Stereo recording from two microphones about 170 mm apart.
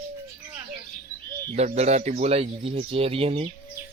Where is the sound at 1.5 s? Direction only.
40° right (ahead or behind).